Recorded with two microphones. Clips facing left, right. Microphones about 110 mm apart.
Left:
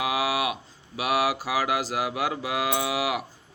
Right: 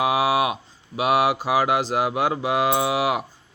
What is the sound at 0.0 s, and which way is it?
Mantra, 25° right (ahead or behind).